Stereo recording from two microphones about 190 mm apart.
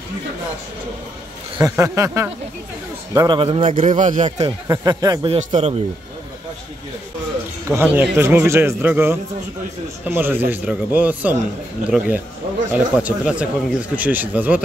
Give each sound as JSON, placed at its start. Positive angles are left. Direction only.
{"t": 1.6, "sound": "speech", "side_deg": -15}
{"t": 3.2, "sound": "speech", "side_deg": -25}
{"t": 3.9, "sound": "a man's voice", "side_deg": -40}
{"t": 4.4, "sound": "speech", "side_deg": -20}
{"t": 5.3, "sound": "a man's voice", "side_deg": -35}
{"t": 7.6, "sound": "speech", "side_deg": -15}